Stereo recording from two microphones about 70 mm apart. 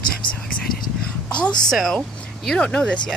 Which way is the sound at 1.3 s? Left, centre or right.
Centre.